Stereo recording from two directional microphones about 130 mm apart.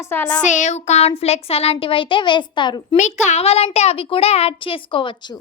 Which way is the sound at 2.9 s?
65° left (ahead or behind).